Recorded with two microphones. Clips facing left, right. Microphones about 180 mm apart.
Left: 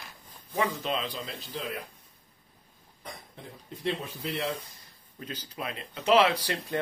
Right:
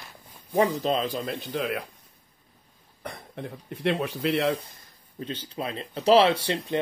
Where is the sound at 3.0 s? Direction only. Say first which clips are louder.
Right 8 dB; 65° right (ahead or behind).